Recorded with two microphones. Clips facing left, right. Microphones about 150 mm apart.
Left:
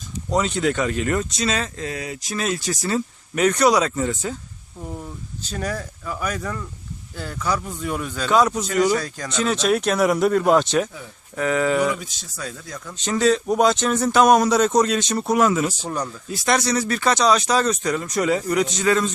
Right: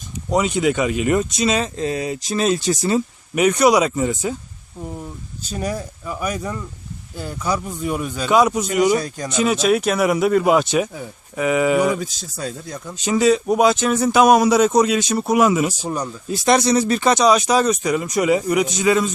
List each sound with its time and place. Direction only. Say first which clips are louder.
0.3 s speech: right 3 dB; 10° right (ahead or behind)
5.4 s speech: right 3 dB; 15° right (ahead or behind)
11.9 s speech: right 6 dB; 35° right (ahead or behind)
13.0 s speech: right 3 dB; 10° right (ahead or behind)